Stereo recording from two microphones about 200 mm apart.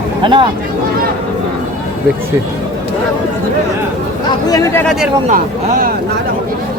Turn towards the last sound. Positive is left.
turn(degrees=-40)  # may be behind; listen again after turning